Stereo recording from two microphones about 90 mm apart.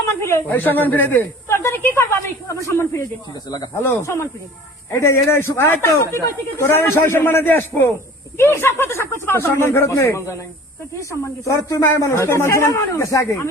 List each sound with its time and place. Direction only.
0.1 s speech: 30° left (ahead or behind)
0.4 s speech: 20° left (ahead or behind)